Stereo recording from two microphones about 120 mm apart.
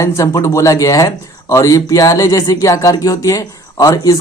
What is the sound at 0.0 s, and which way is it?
Speech, 25° left (ahead or behind).